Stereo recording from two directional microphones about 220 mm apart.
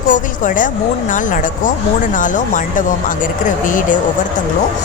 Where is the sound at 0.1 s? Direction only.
35° left (ahead or behind).